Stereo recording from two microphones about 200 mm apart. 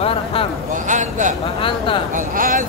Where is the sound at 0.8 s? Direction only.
40° right (ahead or behind).